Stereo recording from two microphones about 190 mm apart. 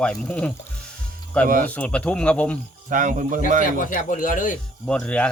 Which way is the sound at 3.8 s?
45° left (ahead or behind).